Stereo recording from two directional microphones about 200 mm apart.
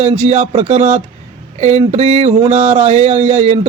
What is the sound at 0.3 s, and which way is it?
Speech, 35° right (ahead or behind).